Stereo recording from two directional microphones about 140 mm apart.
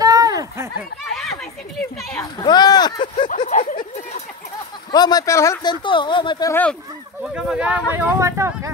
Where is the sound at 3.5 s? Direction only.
65° left (ahead or behind).